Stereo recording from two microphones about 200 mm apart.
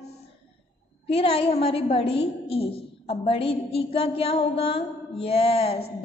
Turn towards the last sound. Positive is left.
turn(degrees=30)  # may be behind; listen again after turning